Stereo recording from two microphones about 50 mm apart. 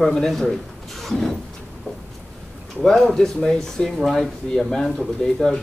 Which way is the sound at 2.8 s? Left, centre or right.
Centre.